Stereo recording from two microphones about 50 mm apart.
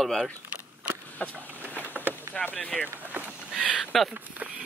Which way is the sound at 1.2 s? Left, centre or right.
Left.